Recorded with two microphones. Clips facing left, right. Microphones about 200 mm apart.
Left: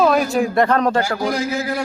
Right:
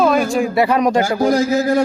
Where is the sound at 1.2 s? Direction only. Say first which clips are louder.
Right 6 dB; 40° right (ahead or behind).